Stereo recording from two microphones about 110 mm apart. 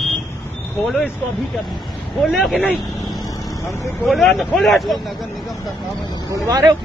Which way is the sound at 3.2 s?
25° left (ahead or behind).